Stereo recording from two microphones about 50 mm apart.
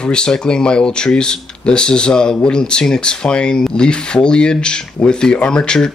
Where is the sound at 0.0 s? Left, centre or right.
Centre.